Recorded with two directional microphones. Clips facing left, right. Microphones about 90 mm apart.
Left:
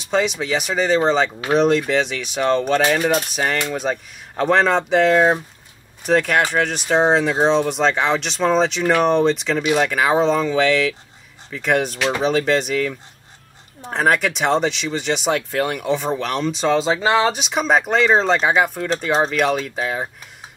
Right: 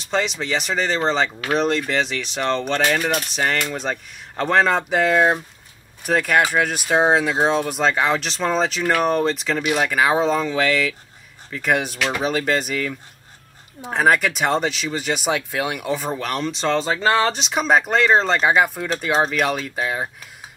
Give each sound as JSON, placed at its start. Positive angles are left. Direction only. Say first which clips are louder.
{"t": 0.0, "sound": "speech", "louder": "left 3 dB", "side_deg": 0}
{"t": 3.0, "sound": "speech", "louder": "left 4 dB", "side_deg": 20}
{"t": 3.3, "sound": "speech", "louder": "left 1 dB", "side_deg": 5}
{"t": 16.7, "sound": "speech", "louder": "left 1 dB", "side_deg": 15}
{"t": 17.4, "sound": "speech", "louder": "even", "side_deg": 0}